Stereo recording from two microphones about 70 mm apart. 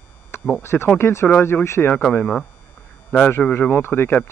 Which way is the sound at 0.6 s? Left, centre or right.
Left.